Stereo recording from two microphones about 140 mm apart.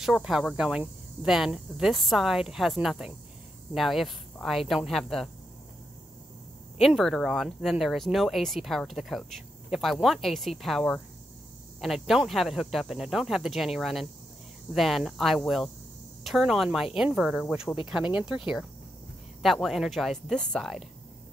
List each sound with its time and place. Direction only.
0.0 s speech: 5° right (ahead or behind)
6.8 s speech: centre (ahead or behind)
19.4 s speech: centre (ahead or behind)